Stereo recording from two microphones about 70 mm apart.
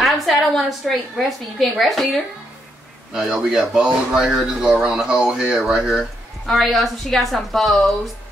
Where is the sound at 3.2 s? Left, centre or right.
Centre.